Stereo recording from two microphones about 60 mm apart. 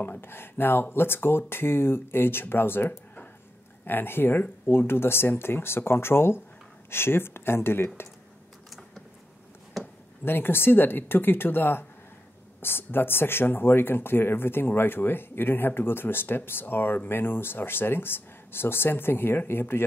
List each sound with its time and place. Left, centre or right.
0.0 s speech: left
8.6 s a sound: centre
10.2 s speech: left